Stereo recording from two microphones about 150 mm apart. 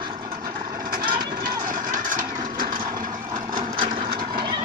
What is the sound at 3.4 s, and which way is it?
Vehicle, 30° right (ahead or behind).